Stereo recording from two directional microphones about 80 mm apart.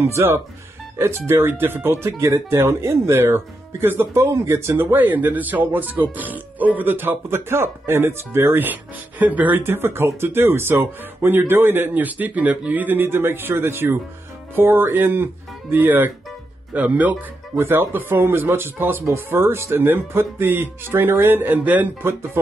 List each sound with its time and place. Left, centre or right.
0.0 s speech: right
9.6 s speech: right